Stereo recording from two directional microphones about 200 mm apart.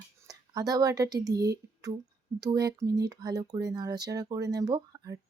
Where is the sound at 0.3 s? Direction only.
20° right (ahead or behind).